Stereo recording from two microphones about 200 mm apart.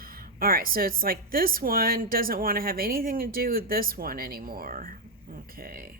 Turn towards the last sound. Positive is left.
turn(degrees=-45)  # may be behind; listen again after turning